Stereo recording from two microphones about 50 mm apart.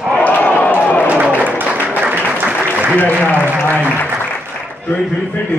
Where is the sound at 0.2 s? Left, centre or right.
Left.